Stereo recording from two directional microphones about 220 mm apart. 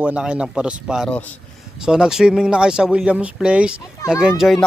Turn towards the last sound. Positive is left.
turn(degrees=0)  # may be behind; listen again after turning